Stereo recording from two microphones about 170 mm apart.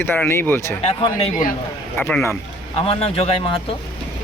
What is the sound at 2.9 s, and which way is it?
Speech, 35° left (ahead or behind).